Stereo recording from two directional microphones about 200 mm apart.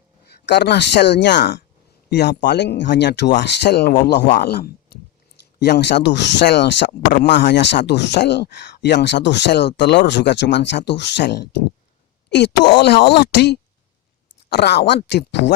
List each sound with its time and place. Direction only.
0.3 s speech: 60° left (ahead or behind)
12.8 s speech: 55° left (ahead or behind)